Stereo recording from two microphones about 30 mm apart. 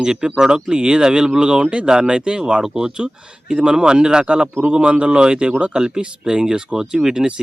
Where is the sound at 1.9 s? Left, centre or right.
Right.